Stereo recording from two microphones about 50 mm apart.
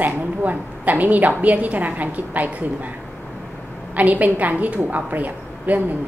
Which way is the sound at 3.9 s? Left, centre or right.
Right.